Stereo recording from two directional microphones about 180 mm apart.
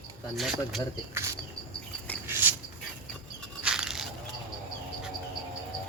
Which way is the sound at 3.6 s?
5° right (ahead or behind).